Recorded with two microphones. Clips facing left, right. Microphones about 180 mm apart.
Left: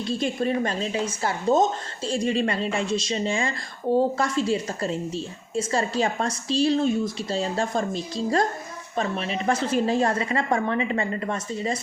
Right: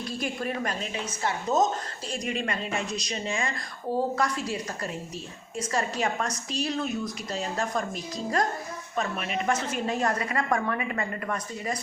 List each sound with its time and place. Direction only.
0.0 s a woman's voice: 25° left (ahead or behind)